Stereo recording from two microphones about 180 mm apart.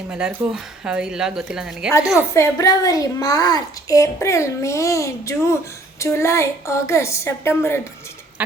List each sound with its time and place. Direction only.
0.1 s speech: 5° right (ahead or behind)
2.3 s a child's voice: 15° left (ahead or behind)